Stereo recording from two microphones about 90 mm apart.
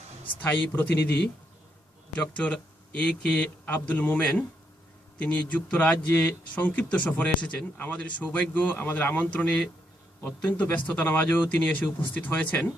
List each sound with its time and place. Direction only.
0.4 s speech: 20° left (ahead or behind)